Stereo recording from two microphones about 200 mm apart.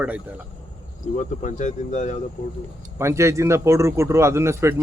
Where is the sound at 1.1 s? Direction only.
40° left (ahead or behind).